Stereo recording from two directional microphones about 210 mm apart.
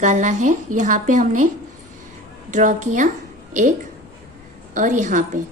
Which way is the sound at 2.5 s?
40° right (ahead or behind).